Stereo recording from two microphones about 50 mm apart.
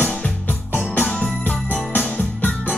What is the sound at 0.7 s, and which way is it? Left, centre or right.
Music, left.